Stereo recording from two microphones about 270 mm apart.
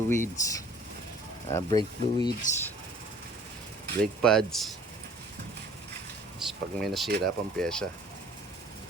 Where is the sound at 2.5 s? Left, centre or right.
Left.